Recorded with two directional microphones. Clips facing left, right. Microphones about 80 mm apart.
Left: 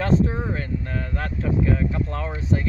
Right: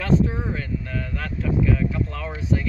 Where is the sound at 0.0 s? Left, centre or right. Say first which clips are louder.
Even; left.